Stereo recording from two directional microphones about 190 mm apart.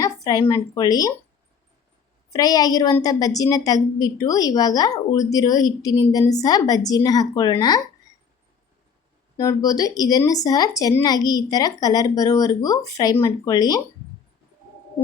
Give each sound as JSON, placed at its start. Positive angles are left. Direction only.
{"t": 0.0, "sound": "a woman's voice", "side_deg": 20}
{"t": 2.3, "sound": "speech", "side_deg": 20}
{"t": 9.4, "sound": "speech", "side_deg": 20}